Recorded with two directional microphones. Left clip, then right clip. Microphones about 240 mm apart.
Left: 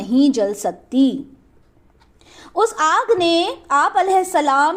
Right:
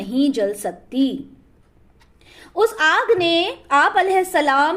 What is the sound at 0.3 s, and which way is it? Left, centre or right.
Speech, left.